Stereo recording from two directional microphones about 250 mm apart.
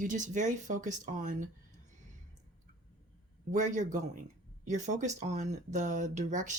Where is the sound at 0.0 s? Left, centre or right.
Right.